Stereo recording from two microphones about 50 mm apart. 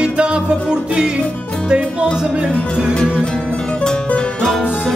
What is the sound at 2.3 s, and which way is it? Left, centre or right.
Music, centre.